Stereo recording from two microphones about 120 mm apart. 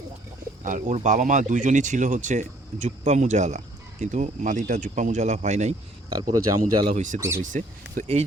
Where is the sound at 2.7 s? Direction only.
70° right (ahead or behind).